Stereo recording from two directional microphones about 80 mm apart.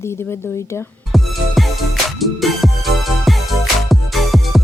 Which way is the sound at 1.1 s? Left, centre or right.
Centre.